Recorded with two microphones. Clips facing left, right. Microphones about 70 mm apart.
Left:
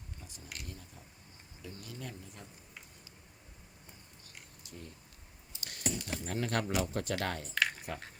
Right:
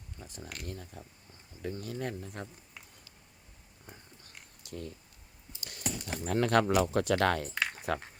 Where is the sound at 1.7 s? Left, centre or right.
Right.